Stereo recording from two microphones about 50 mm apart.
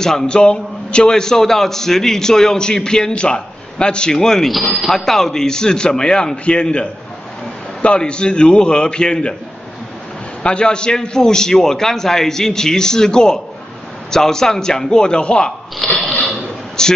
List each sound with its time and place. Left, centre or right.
0.0 s a man's voice: centre
10.4 s a man's voice: centre
15.8 s a sound: centre
16.8 s speech: centre